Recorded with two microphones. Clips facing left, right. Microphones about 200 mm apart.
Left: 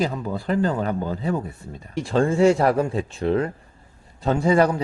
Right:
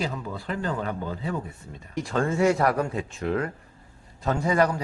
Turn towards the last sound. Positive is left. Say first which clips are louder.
# left 5 dB
turn(degrees=25)  # may be behind; listen again after turning